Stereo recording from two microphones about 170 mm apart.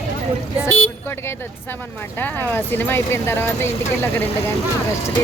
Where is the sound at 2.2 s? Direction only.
10° left (ahead or behind).